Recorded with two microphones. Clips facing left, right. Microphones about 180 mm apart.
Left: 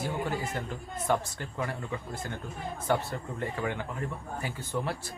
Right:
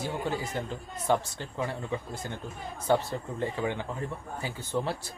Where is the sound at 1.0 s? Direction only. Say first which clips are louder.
Right 2 dB; 25° right (ahead or behind).